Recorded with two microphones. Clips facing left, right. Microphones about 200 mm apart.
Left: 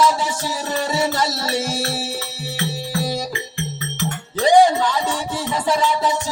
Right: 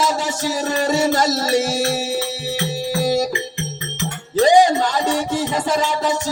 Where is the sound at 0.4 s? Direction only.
45° right (ahead or behind).